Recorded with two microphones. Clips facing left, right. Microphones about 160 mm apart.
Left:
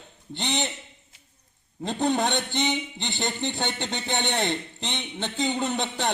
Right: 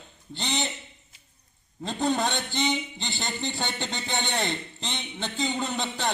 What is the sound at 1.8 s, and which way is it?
A man's voice, 20° left (ahead or behind).